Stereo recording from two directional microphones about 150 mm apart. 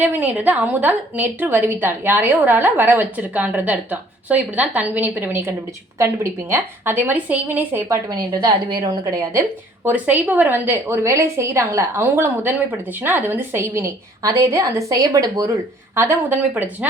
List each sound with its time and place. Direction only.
0.0 s a woman's voice: 10° right (ahead or behind)
8.3 s a woman's voice: 25° right (ahead or behind)
16.0 s a woman's voice: 15° right (ahead or behind)